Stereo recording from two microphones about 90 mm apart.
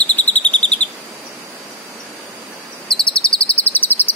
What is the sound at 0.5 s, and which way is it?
Bird vocalization, 15° left (ahead or behind).